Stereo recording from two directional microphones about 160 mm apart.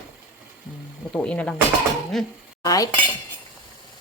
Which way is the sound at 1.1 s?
5° left (ahead or behind).